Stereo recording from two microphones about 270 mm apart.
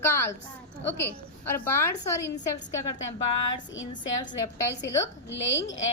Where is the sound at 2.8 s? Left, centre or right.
Left.